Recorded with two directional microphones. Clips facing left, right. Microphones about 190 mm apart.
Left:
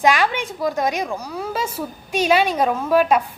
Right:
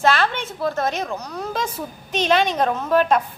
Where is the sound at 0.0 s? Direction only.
15° left (ahead or behind).